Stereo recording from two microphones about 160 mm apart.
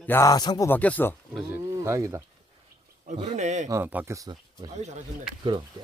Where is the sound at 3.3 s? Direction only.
45° right (ahead or behind).